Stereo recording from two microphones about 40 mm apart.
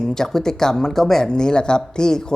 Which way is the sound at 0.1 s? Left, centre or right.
Centre.